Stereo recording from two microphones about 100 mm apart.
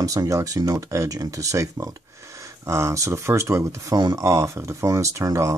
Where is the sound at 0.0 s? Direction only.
35° right (ahead or behind).